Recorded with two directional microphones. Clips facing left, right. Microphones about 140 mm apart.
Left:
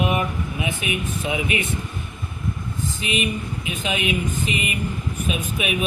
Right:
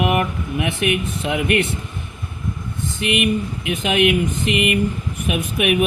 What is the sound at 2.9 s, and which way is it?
Speech, 65° right (ahead or behind).